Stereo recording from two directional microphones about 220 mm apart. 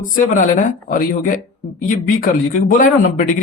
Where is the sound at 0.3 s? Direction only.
35° left (ahead or behind).